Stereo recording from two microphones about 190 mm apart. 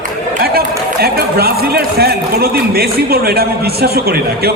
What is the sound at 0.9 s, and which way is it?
A man's voice, 55° right (ahead or behind).